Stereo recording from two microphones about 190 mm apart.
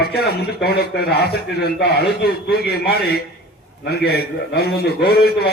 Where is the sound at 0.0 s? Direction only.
55° left (ahead or behind).